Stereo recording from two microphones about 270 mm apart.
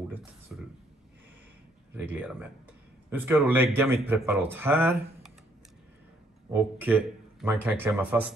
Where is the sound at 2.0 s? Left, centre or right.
Centre.